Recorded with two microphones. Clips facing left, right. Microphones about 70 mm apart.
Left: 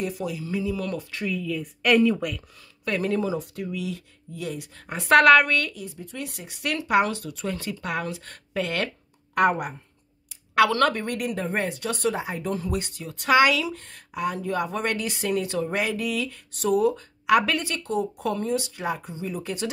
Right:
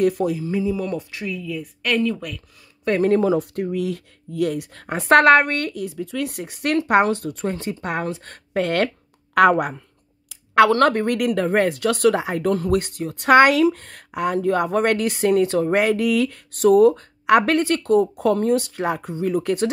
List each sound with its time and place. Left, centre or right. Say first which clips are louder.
0.0 s speech: right 10 dB; right
1.1 s speech: even; centre
2.8 s speech: right 8 dB; right
5.0 s speech: right 2 dB; right
5.8 s speech: right 9 dB; right
6.2 s speech: right 4 dB; right
9.3 s speech: right 6 dB; right
10.5 s speech: right 5 dB; right
11.1 s speech: right 8 dB; right